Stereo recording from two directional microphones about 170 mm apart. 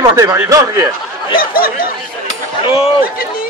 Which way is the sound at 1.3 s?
60° left (ahead or behind).